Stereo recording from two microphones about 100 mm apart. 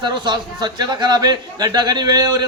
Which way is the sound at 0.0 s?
45° right (ahead or behind).